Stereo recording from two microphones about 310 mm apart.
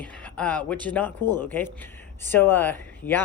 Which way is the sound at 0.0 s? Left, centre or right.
Centre.